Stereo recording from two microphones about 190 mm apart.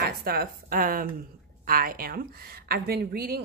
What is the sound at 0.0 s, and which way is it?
A woman's voice, 55° right (ahead or behind).